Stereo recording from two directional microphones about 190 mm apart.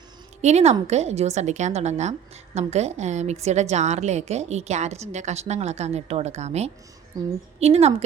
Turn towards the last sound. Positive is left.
turn(degrees=-35)  # may be behind; listen again after turning